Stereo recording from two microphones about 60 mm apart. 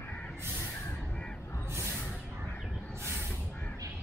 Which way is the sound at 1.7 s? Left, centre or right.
Right.